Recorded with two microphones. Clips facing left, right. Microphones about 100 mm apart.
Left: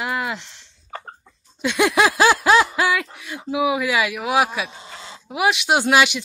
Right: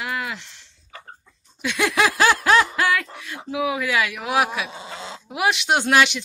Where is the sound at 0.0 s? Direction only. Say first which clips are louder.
Left 3 dB; 25° left (ahead or behind).